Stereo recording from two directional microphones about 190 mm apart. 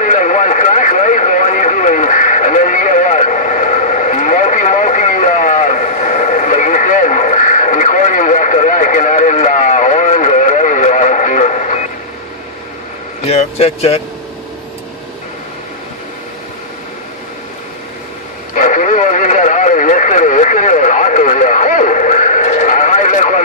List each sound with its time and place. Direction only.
0.0 s radio: 40° left (ahead or behind)
13.3 s speech: 30° left (ahead or behind)
18.5 s radio: 40° left (ahead or behind)